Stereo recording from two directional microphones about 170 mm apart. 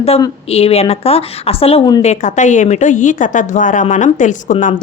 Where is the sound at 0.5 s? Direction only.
35° left (ahead or behind).